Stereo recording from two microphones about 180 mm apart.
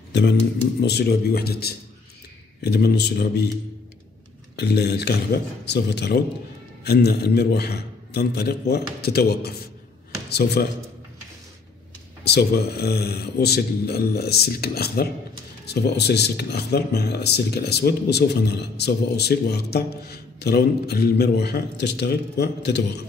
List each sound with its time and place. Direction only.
0.1 s a man's voice: 70° left (ahead or behind)
4.6 s a man's voice: 65° left (ahead or behind)
12.3 s speech: 65° left (ahead or behind)